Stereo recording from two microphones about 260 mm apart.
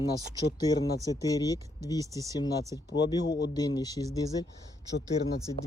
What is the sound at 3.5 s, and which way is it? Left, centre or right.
Speech, centre.